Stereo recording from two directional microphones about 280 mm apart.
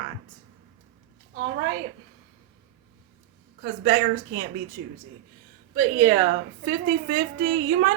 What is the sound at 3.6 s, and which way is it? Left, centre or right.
Speech, right.